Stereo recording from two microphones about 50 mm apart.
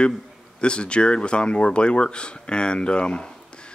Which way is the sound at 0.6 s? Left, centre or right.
Centre.